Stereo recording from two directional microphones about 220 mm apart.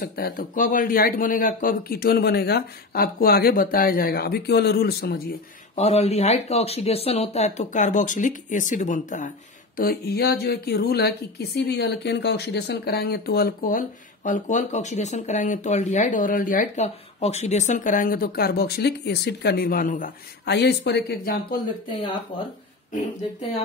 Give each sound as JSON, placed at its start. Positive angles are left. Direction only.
{"t": 0.0, "sound": "speech", "side_deg": 45}
{"t": 5.8, "sound": "a woman's voice", "side_deg": 30}
{"t": 20.4, "sound": "speech", "side_deg": 50}